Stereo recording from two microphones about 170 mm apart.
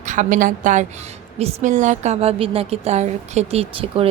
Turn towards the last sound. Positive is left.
turn(degrees=-35)  # may be behind; listen again after turning